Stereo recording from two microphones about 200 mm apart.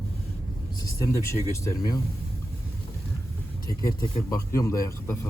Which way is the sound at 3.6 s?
15° left (ahead or behind).